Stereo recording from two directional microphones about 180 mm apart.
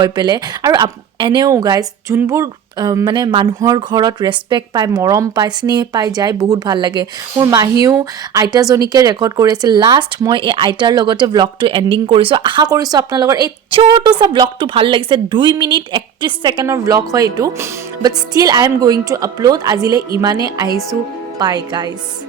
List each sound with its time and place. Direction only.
0.0 s speech: 25° right (ahead or behind)